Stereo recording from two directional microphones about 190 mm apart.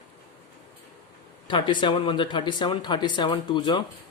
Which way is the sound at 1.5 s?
25° left (ahead or behind).